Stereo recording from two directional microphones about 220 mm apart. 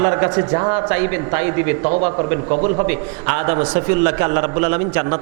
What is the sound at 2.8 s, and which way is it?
A man's voice, 15° right (ahead or behind).